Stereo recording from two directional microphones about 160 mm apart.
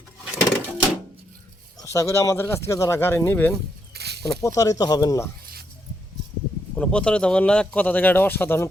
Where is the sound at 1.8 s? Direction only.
20° left (ahead or behind).